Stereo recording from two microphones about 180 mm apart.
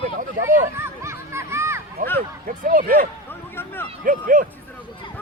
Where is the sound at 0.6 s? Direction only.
15° right (ahead or behind).